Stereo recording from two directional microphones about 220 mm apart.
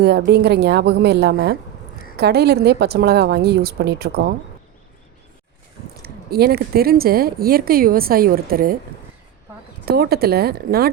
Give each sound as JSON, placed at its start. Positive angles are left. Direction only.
{"t": 0.0, "sound": "speech", "side_deg": -45}
{"t": 6.0, "sound": "speech", "side_deg": -45}
{"t": 9.8, "sound": "speech", "side_deg": -45}